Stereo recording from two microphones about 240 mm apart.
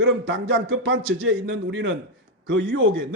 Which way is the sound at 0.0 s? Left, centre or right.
Right.